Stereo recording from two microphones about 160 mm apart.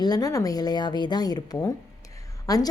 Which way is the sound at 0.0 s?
25° left (ahead or behind).